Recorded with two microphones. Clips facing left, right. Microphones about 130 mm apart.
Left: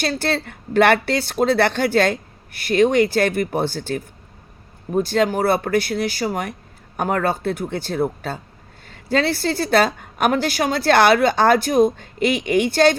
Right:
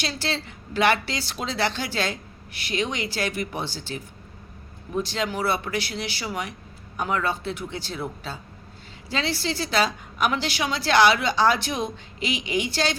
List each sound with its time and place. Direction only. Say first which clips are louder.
0.0 s a woman's voice: left 7 dB; 55° left (ahead or behind)